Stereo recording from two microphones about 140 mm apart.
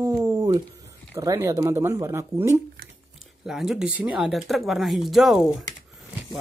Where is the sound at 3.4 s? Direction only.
5° right (ahead or behind).